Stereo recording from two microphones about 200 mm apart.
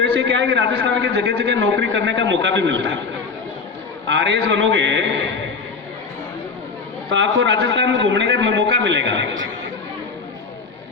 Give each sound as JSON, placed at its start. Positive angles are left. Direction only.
{"t": 0.0, "sound": "a man's voice", "side_deg": -60}
{"t": 4.0, "sound": "a man's voice", "side_deg": -65}
{"t": 7.1, "sound": "a man's voice", "side_deg": -65}